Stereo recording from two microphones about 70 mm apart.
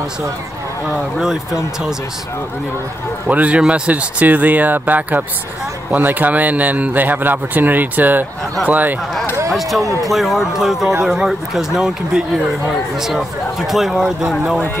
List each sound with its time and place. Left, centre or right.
1.2 s speech: centre
3.3 s a man's voice: right
9.5 s speech: centre